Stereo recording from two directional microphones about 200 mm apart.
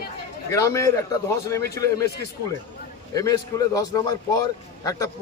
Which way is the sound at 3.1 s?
15° left (ahead or behind).